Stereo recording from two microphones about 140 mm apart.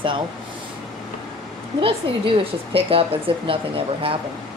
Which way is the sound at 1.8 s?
40° right (ahead or behind).